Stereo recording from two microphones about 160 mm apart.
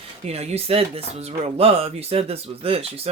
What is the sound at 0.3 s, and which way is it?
Speech, 40° right (ahead or behind).